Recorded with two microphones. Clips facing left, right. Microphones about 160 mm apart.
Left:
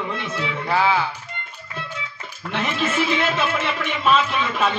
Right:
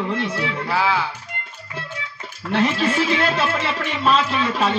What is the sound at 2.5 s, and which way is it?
A man's voice, 35° right (ahead or behind).